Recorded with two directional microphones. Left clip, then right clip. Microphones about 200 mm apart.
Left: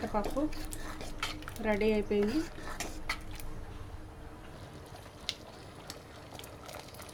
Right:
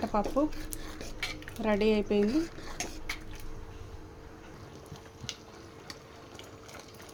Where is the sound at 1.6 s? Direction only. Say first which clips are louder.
Right 3 dB; 30° right (ahead or behind).